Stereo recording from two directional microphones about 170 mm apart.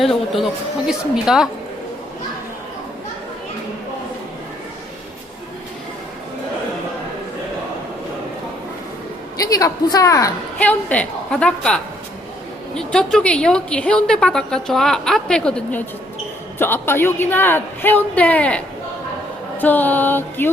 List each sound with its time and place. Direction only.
0.0 s a woman's voice: centre (ahead or behind)
9.4 s a woman's voice: 20° left (ahead or behind)
10.6 s a woman's voice: 10° left (ahead or behind)